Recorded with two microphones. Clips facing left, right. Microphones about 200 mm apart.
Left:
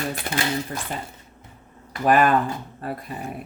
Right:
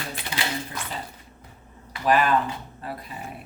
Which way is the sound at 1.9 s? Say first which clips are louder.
Left 3 dB; 50° left (ahead or behind).